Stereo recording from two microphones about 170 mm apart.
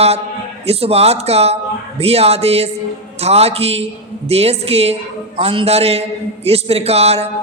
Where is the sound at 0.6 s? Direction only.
35° right (ahead or behind).